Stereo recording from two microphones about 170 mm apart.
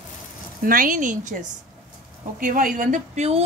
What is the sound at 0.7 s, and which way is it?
Speech, 55° right (ahead or behind).